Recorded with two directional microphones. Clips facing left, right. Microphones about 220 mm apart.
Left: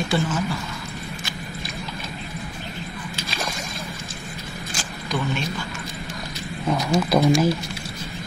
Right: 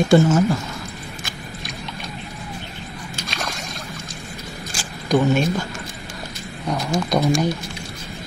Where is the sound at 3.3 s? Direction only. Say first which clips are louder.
Right 1 dB; centre (ahead or behind).